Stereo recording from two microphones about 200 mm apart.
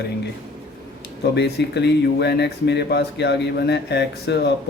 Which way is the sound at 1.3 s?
55° left (ahead or behind).